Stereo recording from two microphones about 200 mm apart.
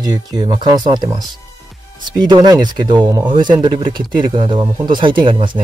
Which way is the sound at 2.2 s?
20° right (ahead or behind).